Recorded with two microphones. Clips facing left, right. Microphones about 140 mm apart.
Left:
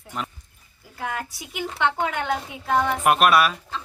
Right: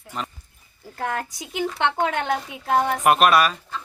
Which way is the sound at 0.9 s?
45° right (ahead or behind).